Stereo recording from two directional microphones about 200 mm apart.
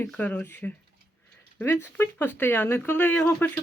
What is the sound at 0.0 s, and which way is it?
A woman's voice, 10° left (ahead or behind).